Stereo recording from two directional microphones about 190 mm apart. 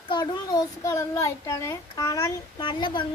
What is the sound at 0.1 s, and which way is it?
A child's voice, 20° left (ahead or behind).